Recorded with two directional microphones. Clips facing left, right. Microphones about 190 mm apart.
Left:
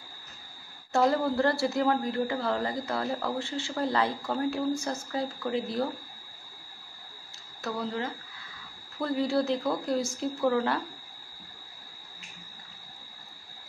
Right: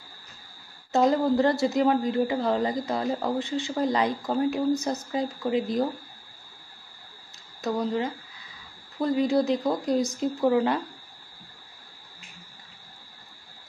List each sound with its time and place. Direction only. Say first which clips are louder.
0.9 s a woman's voice: right 4 dB; 20° right (ahead or behind)
7.6 s speech: right 6 dB; 20° right (ahead or behind)